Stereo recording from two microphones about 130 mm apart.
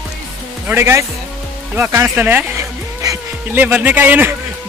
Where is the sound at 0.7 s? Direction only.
20° right (ahead or behind).